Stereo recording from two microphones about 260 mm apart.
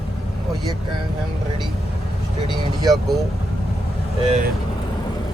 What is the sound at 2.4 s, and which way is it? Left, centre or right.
Speech, centre.